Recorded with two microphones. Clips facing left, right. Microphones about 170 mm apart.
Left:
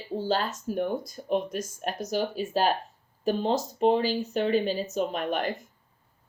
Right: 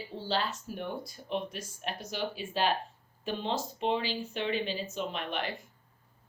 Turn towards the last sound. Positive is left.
turn(degrees=45)  # may be behind; listen again after turning